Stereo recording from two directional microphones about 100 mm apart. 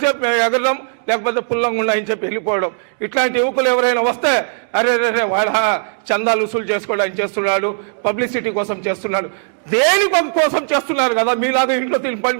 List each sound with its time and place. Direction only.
0.1 s a man's voice: 20° right (ahead or behind)